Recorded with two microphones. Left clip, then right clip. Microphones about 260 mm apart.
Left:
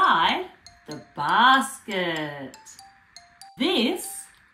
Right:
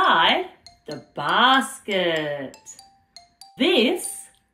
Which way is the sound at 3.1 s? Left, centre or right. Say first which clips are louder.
Right 2 dB; centre.